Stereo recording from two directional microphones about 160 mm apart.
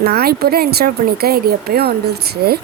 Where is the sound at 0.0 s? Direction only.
75° right (ahead or behind).